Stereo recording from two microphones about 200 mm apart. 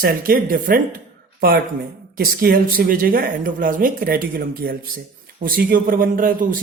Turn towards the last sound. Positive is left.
turn(degrees=-45)  # may be behind; listen again after turning